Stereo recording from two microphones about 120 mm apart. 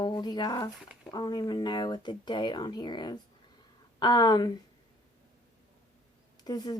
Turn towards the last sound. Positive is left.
turn(degrees=35)  # may be behind; listen again after turning